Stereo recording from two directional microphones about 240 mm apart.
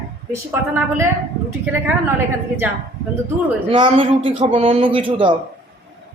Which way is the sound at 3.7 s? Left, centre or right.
Right.